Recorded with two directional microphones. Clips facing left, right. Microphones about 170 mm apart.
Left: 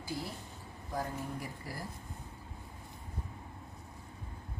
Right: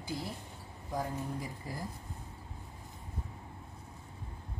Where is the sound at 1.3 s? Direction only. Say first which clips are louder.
Right 2 dB; 20° right (ahead or behind).